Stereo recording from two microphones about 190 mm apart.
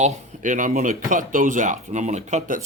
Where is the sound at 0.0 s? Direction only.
40° right (ahead or behind).